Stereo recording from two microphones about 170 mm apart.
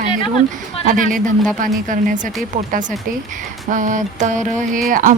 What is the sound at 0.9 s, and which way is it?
Speech, 50° right (ahead or behind).